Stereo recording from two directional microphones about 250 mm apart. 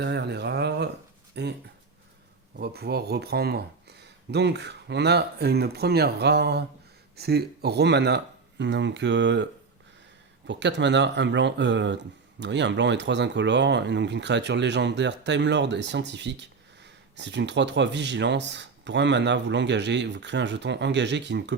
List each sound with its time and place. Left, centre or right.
0.0 s a sound: right
1.4 s speech: right
2.6 s speech: right